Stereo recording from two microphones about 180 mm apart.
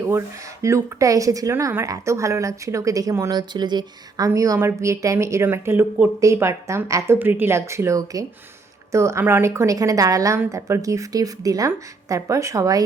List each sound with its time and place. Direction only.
0.6 s speech: 15° right (ahead or behind)